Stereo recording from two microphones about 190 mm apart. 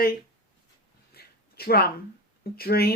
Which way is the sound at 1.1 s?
55° left (ahead or behind).